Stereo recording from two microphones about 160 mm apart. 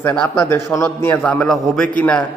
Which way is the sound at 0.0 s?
10° left (ahead or behind).